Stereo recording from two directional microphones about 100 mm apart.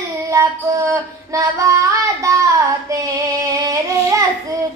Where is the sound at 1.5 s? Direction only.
30° right (ahead or behind).